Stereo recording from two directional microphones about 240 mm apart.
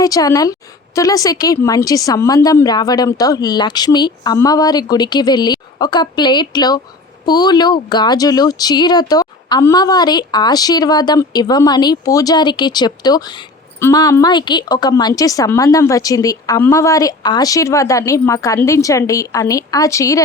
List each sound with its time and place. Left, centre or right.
0.0 s speech: centre